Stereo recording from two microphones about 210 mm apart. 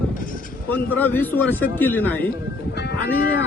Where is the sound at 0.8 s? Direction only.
10° left (ahead or behind).